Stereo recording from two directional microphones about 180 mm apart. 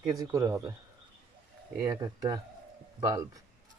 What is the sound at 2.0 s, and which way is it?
Speech, 20° right (ahead or behind).